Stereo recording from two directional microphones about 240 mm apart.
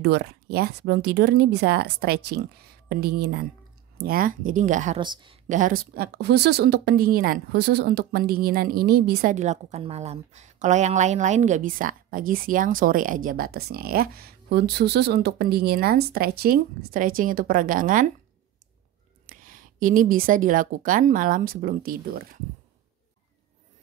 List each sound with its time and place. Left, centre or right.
0.0 s speech: right
5.0 s a woman's voice: centre
5.5 s speech: right
19.2 s a woman's voice: right